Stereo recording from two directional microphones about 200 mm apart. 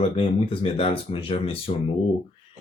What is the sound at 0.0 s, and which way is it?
Speech, 25° left (ahead or behind).